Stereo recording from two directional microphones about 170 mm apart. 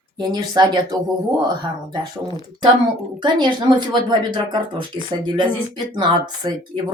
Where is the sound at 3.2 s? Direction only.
25° right (ahead or behind).